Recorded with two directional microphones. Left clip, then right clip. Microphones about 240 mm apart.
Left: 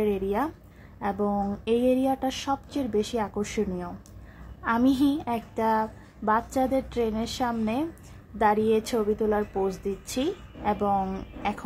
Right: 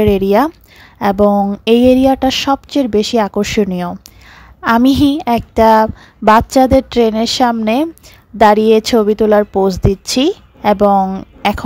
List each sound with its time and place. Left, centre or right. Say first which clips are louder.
0.0 s a woman's voice: right 15 dB; right